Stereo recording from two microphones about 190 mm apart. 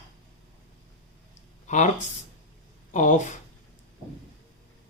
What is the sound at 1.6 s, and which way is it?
Speech, 40° left (ahead or behind).